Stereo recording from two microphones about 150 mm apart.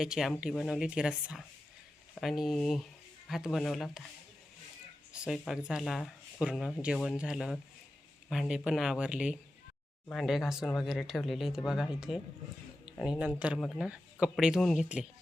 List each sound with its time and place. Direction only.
0.0 s speech: 5° right (ahead or behind)
5.1 s speech: 5° right (ahead or behind)